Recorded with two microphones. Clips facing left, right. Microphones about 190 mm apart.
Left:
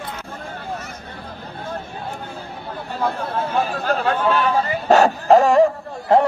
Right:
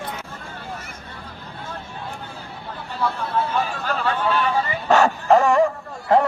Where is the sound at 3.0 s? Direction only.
45° left (ahead or behind).